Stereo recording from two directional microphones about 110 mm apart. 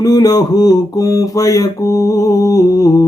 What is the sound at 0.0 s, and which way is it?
Mantra, 35° left (ahead or behind).